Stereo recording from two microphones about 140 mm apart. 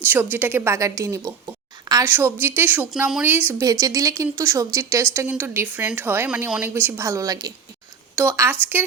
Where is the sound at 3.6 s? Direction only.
25° right (ahead or behind).